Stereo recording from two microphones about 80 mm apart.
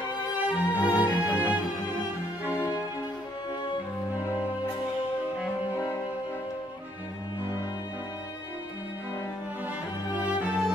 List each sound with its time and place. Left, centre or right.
0.4 s music: centre
10.1 s music: centre